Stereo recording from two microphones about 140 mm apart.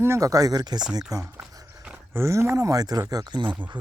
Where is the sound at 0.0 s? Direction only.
20° right (ahead or behind).